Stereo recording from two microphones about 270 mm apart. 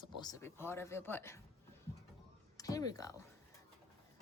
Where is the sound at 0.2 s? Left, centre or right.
Centre.